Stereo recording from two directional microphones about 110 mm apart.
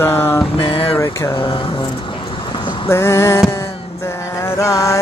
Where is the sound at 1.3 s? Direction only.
50° left (ahead or behind).